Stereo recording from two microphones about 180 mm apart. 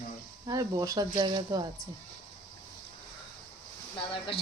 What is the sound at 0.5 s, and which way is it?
Speech, 20° right (ahead or behind).